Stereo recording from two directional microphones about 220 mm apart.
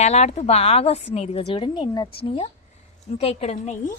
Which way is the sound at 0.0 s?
30° left (ahead or behind).